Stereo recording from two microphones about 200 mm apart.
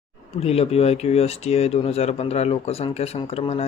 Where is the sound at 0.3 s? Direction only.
30° left (ahead or behind).